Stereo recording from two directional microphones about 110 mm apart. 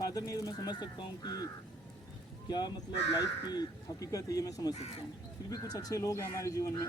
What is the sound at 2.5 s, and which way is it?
Speech, 40° left (ahead or behind).